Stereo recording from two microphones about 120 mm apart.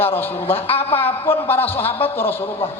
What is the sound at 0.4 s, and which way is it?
Speech, 55° left (ahead or behind).